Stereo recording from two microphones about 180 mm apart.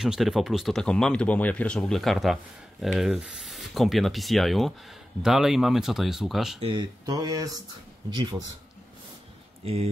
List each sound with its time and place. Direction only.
0.0 s speech: centre (ahead or behind)
6.6 s speech: 25° right (ahead or behind)